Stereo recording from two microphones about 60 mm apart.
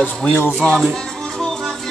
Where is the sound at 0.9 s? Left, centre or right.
Centre.